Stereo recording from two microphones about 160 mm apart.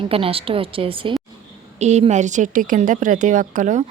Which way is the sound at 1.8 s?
45° right (ahead or behind).